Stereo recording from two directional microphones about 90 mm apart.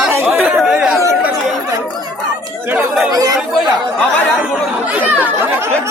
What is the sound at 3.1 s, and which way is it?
Speech, 45° right (ahead or behind).